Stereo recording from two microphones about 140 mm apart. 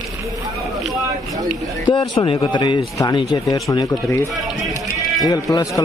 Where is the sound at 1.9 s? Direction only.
35° left (ahead or behind).